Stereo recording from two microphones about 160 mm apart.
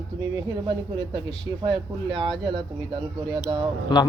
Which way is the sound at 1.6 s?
30° right (ahead or behind).